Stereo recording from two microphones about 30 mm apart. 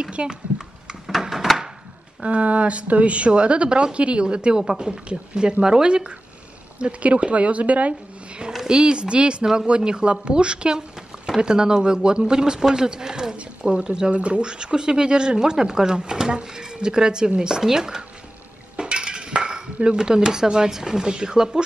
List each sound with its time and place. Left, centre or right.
0.2 s speech: right
1.4 s a sound: centre
2.2 s speech: right
4.6 s speech: right
4.9 s speech: right
6.8 s speech: right
8.6 s speech: right
8.9 s speech: right
14.1 s speech: right
14.4 s speech: right
18.8 s speech: right